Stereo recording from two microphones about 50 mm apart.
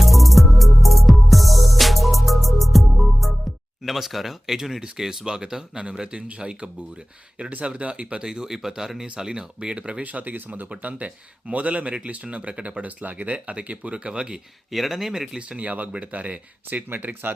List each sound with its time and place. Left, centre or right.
0.0 s music: centre
3.8 s speech: centre; by 10.0 s right
10.0 s speech: right; by 14.4 s centre
14.7 s speech: centre
15.4 s speech: right